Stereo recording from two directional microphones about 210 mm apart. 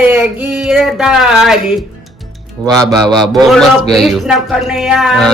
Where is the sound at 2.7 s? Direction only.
Centre (ahead or behind).